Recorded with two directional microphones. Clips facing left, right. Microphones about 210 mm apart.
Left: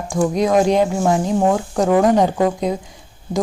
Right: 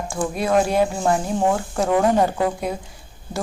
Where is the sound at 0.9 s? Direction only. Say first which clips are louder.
Left 3 dB; centre (ahead or behind).